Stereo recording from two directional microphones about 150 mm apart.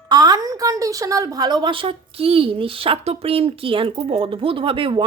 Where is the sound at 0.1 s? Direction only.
25° right (ahead or behind).